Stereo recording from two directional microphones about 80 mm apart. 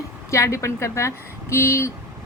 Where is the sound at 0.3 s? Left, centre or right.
Left.